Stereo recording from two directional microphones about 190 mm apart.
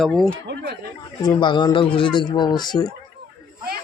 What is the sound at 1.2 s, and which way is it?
Speech, 25° left (ahead or behind).